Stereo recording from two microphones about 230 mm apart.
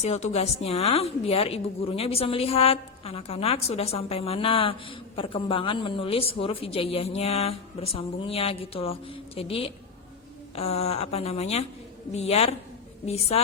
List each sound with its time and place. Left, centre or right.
0.0 s a woman's voice: left